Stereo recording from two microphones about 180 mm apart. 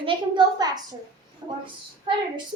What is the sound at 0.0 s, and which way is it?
A woman's voice, 25° right (ahead or behind).